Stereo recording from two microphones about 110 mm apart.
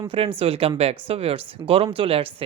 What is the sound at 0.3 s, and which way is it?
Speech, 60° right (ahead or behind).